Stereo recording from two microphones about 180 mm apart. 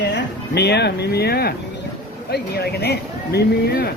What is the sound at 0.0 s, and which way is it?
Speech, 70° left (ahead or behind).